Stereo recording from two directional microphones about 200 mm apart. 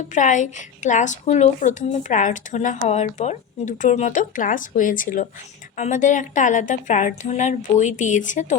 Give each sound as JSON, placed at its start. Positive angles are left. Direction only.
{"t": 0.0, "sound": "speech", "side_deg": 40}